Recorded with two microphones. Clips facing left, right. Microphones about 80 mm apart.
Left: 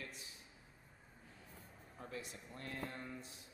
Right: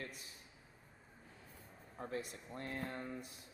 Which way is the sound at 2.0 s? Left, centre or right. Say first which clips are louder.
Right 5 dB; right.